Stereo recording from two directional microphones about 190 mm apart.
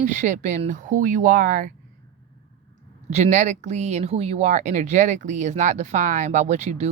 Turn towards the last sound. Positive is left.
turn(degrees=-35)  # may be behind; listen again after turning